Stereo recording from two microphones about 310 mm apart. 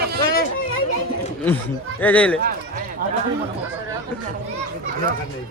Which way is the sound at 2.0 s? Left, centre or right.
Centre.